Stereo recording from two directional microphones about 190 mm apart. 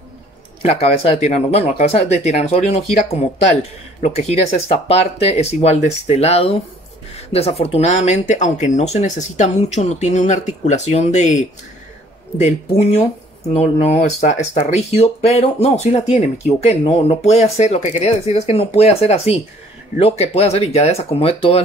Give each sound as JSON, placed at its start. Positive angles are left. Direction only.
{"t": 0.6, "sound": "speech", "side_deg": 35}